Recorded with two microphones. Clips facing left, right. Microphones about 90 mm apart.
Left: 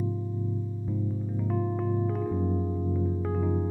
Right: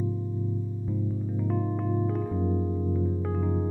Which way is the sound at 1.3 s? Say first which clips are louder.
Even; centre (ahead or behind).